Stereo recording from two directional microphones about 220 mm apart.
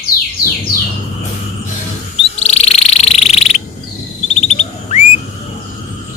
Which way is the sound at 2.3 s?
30° left (ahead or behind).